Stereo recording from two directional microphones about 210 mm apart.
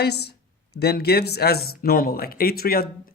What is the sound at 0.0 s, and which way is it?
A man's voice, 50° left (ahead or behind).